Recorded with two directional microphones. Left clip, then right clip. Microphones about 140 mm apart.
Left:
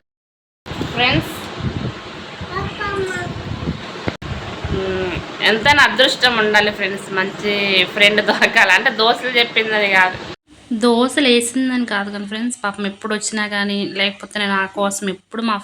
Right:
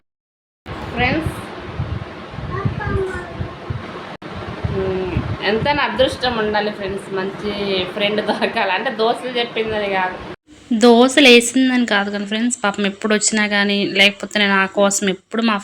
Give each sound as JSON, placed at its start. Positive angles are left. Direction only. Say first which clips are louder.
{"t": 5.4, "sound": "a woman's voice", "louder": "left 6 dB", "side_deg": -5}
{"t": 10.8, "sound": "a woman's voice", "louder": "right 4 dB", "side_deg": -20}